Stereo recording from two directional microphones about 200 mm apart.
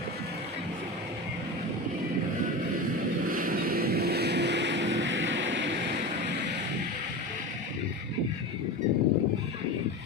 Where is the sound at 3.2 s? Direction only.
45° right (ahead or behind); by 6.6 s 60° right (ahead or behind).